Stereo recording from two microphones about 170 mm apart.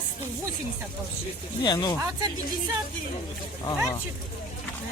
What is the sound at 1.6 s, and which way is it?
Speech, 25° left (ahead or behind).